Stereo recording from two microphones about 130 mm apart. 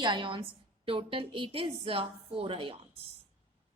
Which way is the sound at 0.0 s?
40° right (ahead or behind).